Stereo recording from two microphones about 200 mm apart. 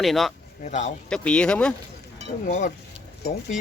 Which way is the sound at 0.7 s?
35° left (ahead or behind).